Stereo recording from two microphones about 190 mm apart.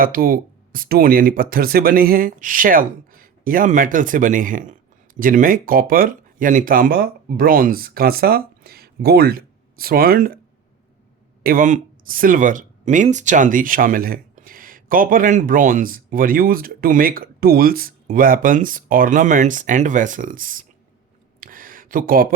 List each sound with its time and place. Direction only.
0.0 s speech: 50° right (ahead or behind)
11.4 s speech: 45° right (ahead or behind)
21.4 s a sound: 45° right (ahead or behind)